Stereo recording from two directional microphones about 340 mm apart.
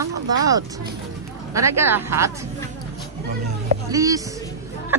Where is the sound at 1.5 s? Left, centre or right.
Centre.